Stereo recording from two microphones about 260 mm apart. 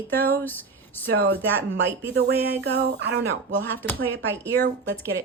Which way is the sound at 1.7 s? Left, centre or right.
Right.